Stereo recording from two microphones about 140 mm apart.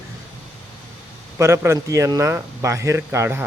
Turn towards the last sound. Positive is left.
turn(degrees=-15)  # may be behind; listen again after turning